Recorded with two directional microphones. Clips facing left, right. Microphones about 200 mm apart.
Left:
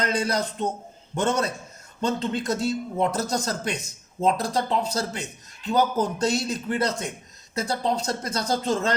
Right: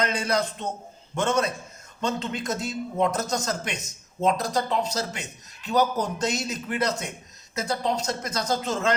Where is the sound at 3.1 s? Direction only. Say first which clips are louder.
Left 1 dB; 35° left (ahead or behind).